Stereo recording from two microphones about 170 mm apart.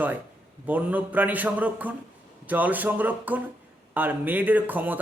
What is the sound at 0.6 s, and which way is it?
A man's voice, 10° right (ahead or behind).